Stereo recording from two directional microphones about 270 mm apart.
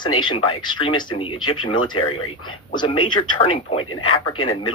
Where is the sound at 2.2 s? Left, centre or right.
Left.